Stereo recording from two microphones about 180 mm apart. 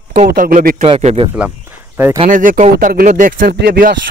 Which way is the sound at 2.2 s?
50° right (ahead or behind).